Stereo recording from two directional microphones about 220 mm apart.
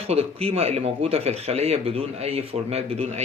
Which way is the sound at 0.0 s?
25° right (ahead or behind).